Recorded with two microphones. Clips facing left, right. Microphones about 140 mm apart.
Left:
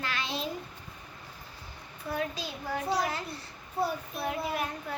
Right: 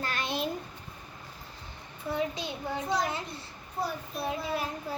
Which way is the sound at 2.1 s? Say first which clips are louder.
Right 2 dB; 20° right (ahead or behind).